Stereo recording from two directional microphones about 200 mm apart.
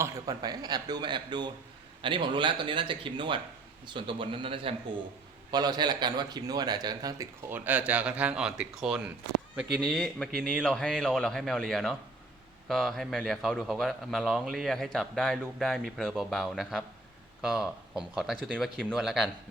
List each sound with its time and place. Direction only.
0.0 s a man's voice: 20° right (ahead or behind); by 19.3 s centre (ahead or behind)